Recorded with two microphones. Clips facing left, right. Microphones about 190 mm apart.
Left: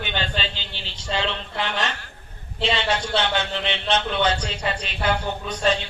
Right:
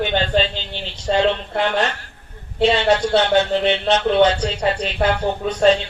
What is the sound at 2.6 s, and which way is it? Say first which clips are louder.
Speech: right 8 dB; 45° right (ahead or behind).